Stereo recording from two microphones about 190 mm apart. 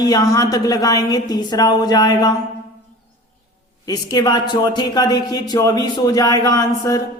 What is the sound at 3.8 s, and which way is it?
Speech, 20° left (ahead or behind).